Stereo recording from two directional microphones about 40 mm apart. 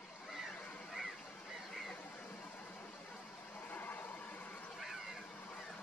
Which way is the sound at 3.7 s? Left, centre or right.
Left.